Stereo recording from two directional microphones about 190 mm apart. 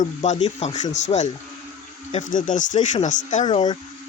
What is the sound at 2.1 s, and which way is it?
Speech, 40° left (ahead or behind).